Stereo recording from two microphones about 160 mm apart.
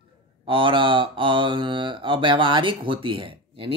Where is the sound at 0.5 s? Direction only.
30° right (ahead or behind).